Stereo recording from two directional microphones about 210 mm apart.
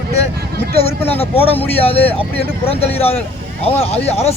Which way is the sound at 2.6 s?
30° left (ahead or behind).